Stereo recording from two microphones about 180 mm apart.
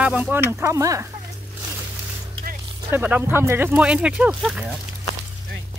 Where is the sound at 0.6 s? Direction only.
15° right (ahead or behind).